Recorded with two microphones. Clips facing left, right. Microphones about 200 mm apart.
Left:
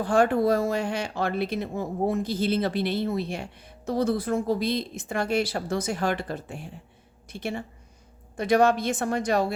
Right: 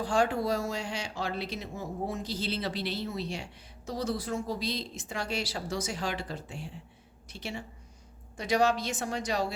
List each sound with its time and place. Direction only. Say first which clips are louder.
0.0 s speech: left 6 dB; 55° left (ahead or behind)